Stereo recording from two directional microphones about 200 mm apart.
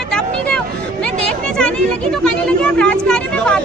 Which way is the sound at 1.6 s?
5° left (ahead or behind).